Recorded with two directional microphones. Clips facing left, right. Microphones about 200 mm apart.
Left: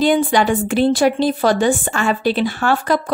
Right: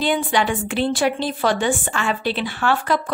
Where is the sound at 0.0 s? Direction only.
45° left (ahead or behind).